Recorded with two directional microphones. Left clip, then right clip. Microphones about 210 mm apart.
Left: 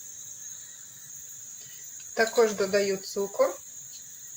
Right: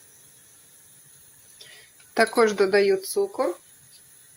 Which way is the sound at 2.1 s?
55° right (ahead or behind).